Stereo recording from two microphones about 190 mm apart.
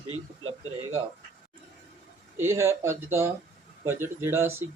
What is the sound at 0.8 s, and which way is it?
Speech, 90° right.